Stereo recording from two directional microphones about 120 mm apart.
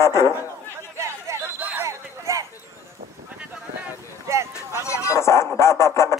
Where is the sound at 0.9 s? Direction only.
25° right (ahead or behind).